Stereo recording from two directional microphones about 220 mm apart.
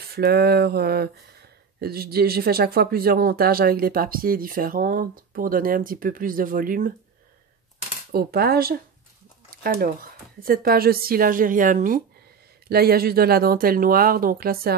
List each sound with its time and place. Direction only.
0.1 s speech: 45° right (ahead or behind)
8.1 s speech: 45° right (ahead or behind)